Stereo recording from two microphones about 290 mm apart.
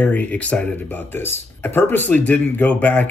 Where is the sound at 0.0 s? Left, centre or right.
Centre.